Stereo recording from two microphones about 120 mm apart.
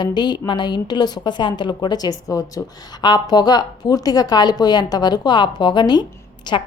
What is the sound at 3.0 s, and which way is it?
Speech, 35° left (ahead or behind).